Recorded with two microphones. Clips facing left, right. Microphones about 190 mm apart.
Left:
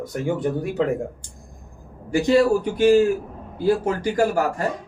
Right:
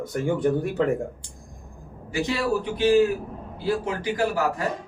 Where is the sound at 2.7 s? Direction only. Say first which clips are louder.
Left 2 dB; 45° left (ahead or behind).